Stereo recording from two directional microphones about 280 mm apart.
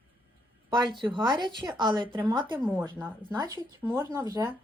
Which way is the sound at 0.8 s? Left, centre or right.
Centre.